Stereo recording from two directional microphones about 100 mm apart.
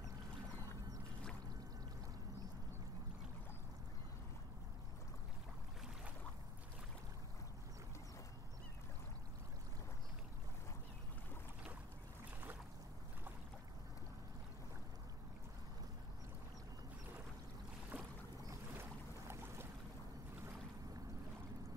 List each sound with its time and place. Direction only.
17.9 s boat: 15° right (ahead or behind)
18.5 s boat: 25° right (ahead or behind)